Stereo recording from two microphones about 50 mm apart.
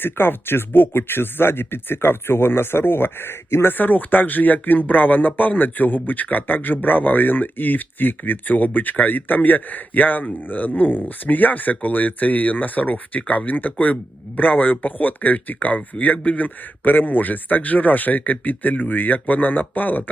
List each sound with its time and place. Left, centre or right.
0.0 s speech: left
3.8 s speech: left